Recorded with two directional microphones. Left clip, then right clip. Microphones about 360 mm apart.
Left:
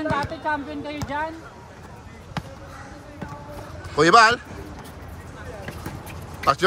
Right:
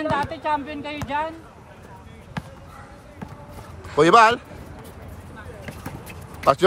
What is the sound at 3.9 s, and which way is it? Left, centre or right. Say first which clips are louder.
Speech: even; centre.